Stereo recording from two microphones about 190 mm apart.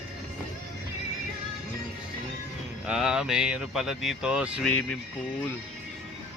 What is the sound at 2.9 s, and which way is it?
Speech, 5° right (ahead or behind).